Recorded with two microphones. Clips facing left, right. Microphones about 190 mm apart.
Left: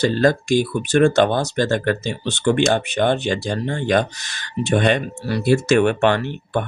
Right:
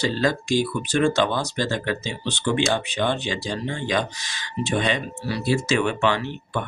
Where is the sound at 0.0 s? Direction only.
50° left (ahead or behind).